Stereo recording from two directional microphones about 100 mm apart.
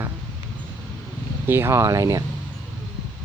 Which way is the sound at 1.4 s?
25° right (ahead or behind).